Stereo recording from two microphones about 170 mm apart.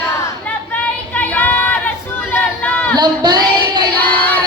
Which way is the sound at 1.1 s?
10° left (ahead or behind).